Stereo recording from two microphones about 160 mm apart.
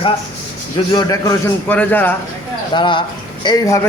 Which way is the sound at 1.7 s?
10° left (ahead or behind).